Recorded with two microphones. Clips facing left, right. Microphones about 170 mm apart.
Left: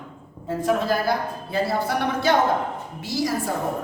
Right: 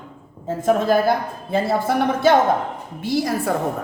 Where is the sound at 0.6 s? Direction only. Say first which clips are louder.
Right 5 dB; 50° right (ahead or behind).